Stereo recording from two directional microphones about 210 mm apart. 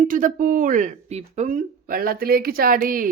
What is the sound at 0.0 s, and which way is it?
Speech, 40° right (ahead or behind).